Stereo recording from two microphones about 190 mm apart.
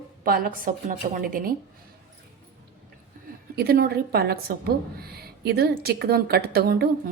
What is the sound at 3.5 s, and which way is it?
A woman's voice, 55° right (ahead or behind).